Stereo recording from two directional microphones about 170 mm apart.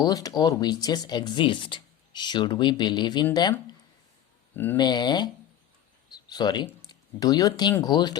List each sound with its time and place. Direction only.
0.0 s speech: 20° left (ahead or behind)
4.5 s speech: 10° left (ahead or behind)
4.8 s speech: 25° left (ahead or behind)
6.1 s a sound: 25° left (ahead or behind)
6.7 s speech: 20° left (ahead or behind)